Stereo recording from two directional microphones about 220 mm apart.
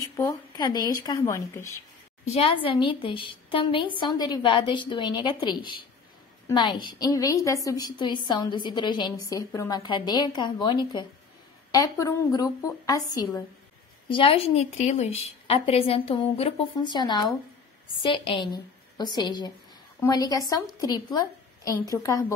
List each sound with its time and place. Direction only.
0.0 s a woman's voice: 15° left (ahead or behind)
2.2 s a woman's voice: 25° left (ahead or behind)